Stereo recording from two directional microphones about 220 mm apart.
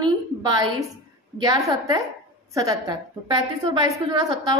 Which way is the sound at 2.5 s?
15° right (ahead or behind).